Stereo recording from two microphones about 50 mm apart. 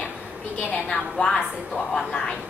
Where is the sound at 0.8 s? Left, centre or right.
Centre.